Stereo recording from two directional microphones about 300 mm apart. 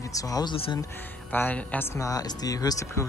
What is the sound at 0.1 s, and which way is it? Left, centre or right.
Speech, centre.